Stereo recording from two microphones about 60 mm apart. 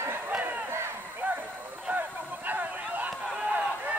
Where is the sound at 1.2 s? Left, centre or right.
Right.